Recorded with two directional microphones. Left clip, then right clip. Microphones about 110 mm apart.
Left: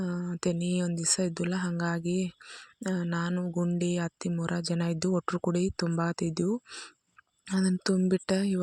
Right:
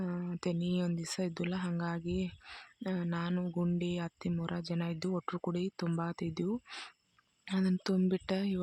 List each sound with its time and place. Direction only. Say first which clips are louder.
0.0 s speech: left 6 dB; 45° left (ahead or behind)
2.4 s speech: left 3 dB; 20° left (ahead or behind)
2.8 s speech: left 5 dB; 45° left (ahead or behind)
6.7 s speech: left 2 dB; 15° left (ahead or behind)
7.5 s speech: left 5 dB; 45° left (ahead or behind)